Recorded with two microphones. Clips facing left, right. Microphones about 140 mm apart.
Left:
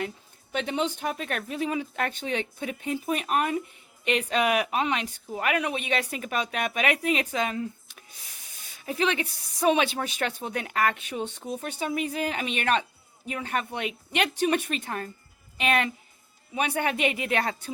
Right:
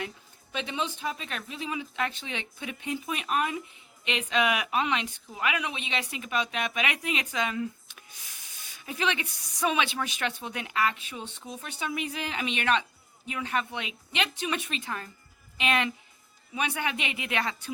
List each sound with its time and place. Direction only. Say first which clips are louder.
0.5 s speech: left 5 dB; 50° left (ahead or behind)